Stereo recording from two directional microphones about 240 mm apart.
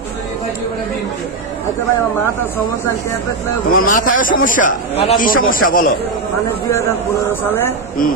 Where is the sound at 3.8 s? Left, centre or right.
Left.